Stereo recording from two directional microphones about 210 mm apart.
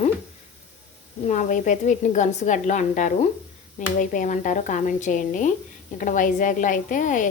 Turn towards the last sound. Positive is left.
turn(degrees=40)  # may be behind; listen again after turning